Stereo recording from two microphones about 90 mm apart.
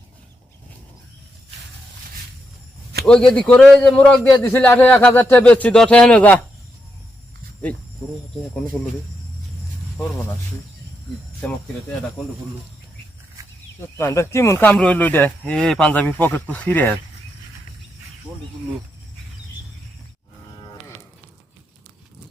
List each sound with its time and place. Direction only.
3.0 s speech: 5° left (ahead or behind)
4.4 s speech: 25° left (ahead or behind)
11.4 s speech: 20° left (ahead or behind)
13.9 s speech: 30° left (ahead or behind)
14.6 s speech: 15° left (ahead or behind)
15.9 s speech: 20° left (ahead or behind)